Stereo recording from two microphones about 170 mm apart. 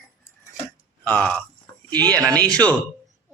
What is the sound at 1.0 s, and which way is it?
Speech, 10° left (ahead or behind).